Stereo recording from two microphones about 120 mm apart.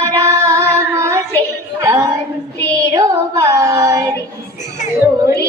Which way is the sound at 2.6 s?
30° right (ahead or behind).